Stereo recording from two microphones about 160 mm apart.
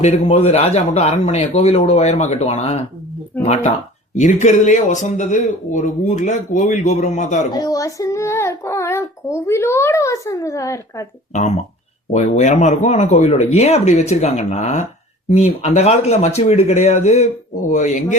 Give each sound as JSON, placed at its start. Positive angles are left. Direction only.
{"t": 0.0, "sound": "a man's voice", "side_deg": 40}
{"t": 7.5, "sound": "speech", "side_deg": 20}
{"t": 11.3, "sound": "speech", "side_deg": 45}